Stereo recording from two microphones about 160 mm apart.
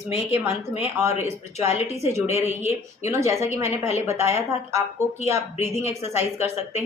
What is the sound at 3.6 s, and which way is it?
Speech, 40° left (ahead or behind).